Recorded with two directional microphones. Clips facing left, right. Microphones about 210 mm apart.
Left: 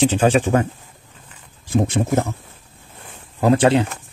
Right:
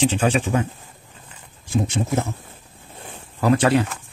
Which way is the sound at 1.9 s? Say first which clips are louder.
Left 4 dB; 55° left (ahead or behind).